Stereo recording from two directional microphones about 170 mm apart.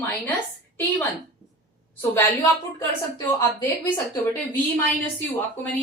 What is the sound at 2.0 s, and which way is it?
A woman's voice, 10° left (ahead or behind).